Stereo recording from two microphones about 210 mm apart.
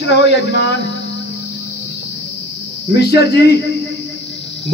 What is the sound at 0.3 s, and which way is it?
Speech, 50° left (ahead or behind).